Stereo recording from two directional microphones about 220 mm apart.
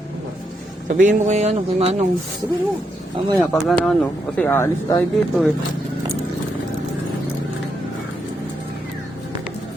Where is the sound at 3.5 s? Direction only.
Centre (ahead or behind).